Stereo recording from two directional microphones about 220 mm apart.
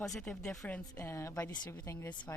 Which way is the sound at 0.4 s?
15° left (ahead or behind).